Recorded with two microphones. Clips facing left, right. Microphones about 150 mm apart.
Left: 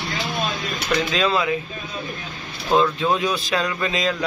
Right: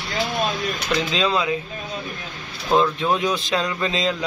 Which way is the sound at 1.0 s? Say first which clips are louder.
Left 1 dB; 20° right (ahead or behind).